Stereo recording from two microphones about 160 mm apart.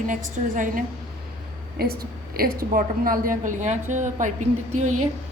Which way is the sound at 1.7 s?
70° right (ahead or behind).